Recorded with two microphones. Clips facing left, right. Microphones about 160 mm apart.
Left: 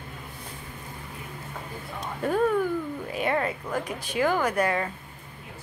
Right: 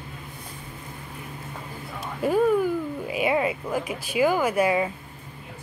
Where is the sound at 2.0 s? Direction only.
10° right (ahead or behind).